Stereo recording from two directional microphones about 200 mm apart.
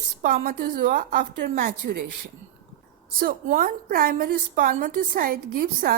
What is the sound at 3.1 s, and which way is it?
A woman's voice, 45° right (ahead or behind).